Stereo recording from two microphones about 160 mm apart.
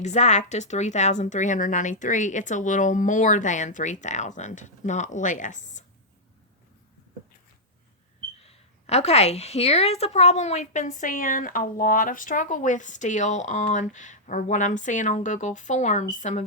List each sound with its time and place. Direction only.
0.0 s a woman's voice: 45° left (ahead or behind)
8.4 s a woman's voice: 40° left (ahead or behind)